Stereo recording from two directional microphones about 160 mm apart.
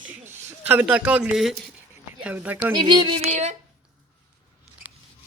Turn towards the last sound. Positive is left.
turn(degrees=-45)  # may be behind; listen again after turning